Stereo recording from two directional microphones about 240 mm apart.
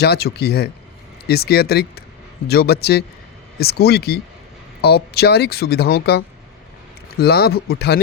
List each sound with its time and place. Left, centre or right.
0.0 s speech: left